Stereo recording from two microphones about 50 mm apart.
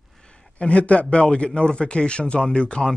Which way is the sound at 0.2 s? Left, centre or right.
Centre.